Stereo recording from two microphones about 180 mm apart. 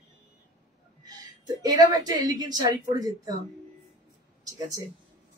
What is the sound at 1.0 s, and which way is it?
A woman's voice, 20° right (ahead or behind).